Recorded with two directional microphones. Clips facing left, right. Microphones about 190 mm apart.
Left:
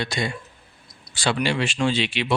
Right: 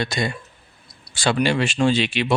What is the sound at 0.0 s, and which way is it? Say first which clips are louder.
Speech: right 2 dB; 45° right (ahead or behind).